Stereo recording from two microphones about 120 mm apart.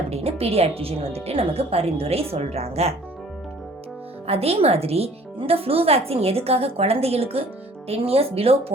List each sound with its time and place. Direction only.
0.1 s speech: 55° right (ahead or behind)
4.3 s speech: 55° right (ahead or behind)